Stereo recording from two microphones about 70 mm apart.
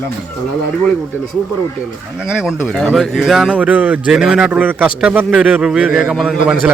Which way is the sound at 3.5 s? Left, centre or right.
Right.